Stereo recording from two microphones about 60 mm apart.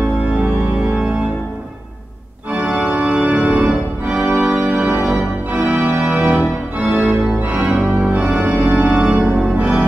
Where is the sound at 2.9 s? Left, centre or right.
Right.